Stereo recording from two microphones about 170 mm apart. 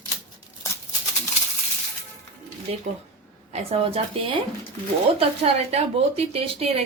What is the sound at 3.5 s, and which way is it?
Speech, 35° right (ahead or behind).